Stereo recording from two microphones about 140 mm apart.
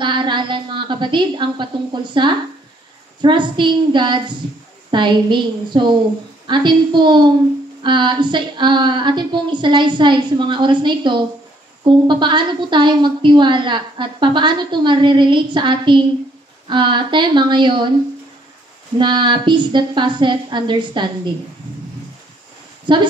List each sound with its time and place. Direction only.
0.0 s a woman's voice: 35° right (ahead or behind)
18.9 s a woman's voice: 35° right (ahead or behind)
22.9 s a woman's voice: 35° right (ahead or behind)